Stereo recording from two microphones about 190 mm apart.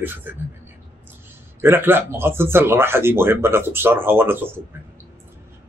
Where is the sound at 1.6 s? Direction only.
10° right (ahead or behind).